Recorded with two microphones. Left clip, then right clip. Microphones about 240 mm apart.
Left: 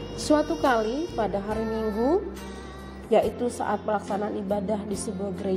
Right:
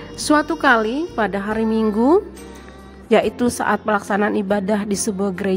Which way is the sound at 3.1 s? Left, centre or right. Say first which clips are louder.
Right 6 dB; right.